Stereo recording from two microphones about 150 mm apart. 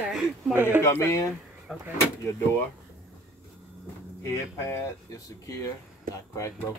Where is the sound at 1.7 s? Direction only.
Centre (ahead or behind).